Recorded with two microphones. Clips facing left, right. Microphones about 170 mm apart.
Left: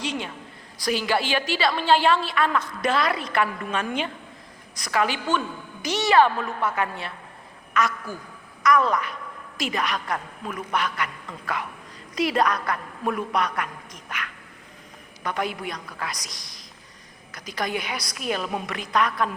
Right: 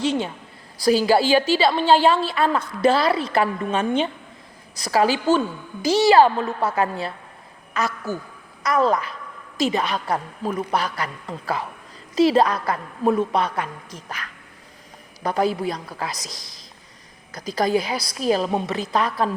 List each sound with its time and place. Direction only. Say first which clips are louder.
0.0 s a woman's voice: right 7 dB; 30° right (ahead or behind)
17.3 s a woman's voice: right 8 dB; 35° right (ahead or behind)